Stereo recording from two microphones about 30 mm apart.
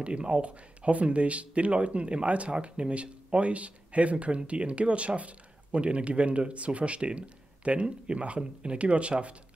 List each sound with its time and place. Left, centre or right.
0.0 s speech: right